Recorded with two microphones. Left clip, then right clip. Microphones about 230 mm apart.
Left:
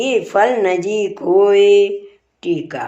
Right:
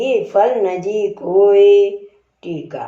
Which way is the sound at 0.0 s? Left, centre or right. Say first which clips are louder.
Even; left.